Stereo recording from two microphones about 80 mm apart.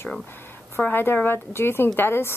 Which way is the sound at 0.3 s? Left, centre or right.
Left.